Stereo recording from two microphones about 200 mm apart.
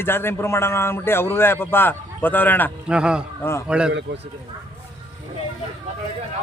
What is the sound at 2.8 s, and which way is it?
Speech, 5° right (ahead or behind).